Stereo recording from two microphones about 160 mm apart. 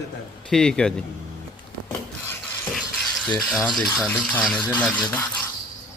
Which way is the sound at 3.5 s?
Centre (ahead or behind).